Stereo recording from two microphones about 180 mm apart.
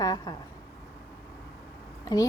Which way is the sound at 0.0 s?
20° left (ahead or behind).